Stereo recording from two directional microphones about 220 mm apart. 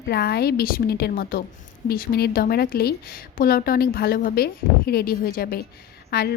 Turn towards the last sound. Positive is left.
turn(degrees=45)  # may be behind; listen again after turning